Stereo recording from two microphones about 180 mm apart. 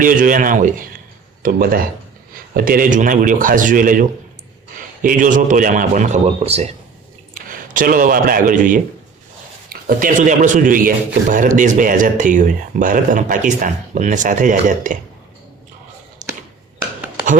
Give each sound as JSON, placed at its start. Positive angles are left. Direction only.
{"t": 0.0, "sound": "a man's voice", "side_deg": -50}
{"t": 7.3, "sound": "a man's voice", "side_deg": -50}
{"t": 16.2, "sound": "a sound", "side_deg": -45}